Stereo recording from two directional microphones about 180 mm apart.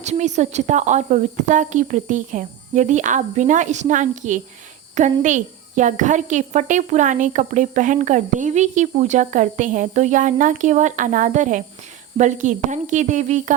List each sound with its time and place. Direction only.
0.0 s speech: 40° right (ahead or behind)